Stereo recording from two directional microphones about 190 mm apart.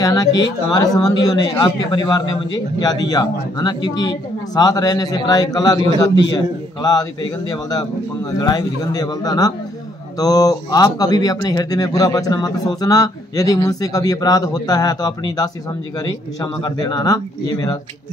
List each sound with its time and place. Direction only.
0.0 s a man's voice: 20° left (ahead or behind)